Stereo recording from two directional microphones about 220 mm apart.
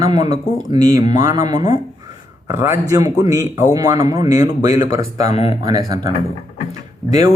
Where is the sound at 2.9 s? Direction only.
15° right (ahead or behind).